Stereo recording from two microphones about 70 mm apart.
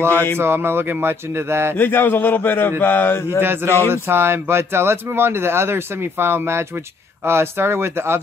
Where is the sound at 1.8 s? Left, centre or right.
Left.